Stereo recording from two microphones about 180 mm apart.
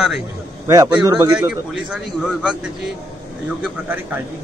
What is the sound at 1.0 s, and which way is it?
Speech, 20° right (ahead or behind).